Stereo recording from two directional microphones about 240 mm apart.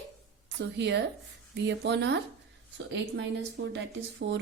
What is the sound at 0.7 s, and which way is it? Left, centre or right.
Speech, right.